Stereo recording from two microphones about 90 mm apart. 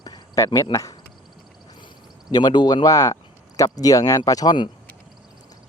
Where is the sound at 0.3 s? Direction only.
40° left (ahead or behind).